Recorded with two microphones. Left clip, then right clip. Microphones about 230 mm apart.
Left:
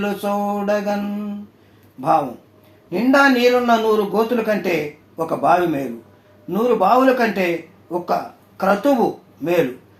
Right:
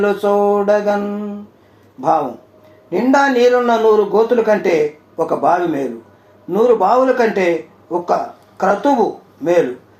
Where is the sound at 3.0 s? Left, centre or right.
Left.